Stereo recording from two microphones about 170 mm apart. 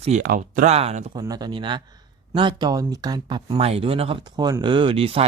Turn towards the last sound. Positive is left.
turn(degrees=-30)  # may be behind; listen again after turning